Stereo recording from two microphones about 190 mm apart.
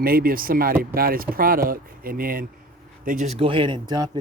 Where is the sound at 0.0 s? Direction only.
50° right (ahead or behind).